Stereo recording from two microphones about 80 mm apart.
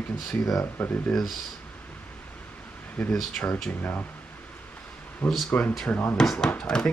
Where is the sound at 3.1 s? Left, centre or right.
Centre.